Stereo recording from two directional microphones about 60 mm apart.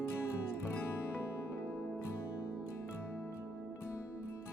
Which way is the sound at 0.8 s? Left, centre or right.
Left.